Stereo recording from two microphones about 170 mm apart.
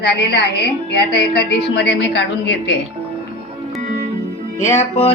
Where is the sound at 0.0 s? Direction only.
85° left.